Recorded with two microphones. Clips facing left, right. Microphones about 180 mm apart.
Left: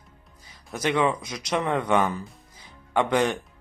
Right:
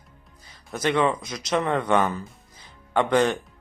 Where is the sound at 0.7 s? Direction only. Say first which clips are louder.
Right 1 dB; 15° left (ahead or behind).